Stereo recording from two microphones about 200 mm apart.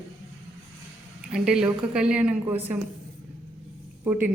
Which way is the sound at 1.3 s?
5° right (ahead or behind).